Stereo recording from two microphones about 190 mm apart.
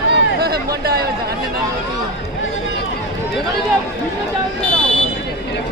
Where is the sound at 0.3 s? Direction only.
55° right (ahead or behind).